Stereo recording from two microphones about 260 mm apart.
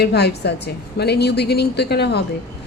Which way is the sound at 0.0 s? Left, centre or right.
Left.